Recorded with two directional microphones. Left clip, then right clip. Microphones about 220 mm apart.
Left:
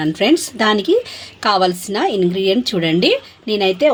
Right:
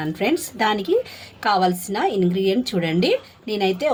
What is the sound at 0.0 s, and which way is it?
A woman's voice, 40° left (ahead or behind).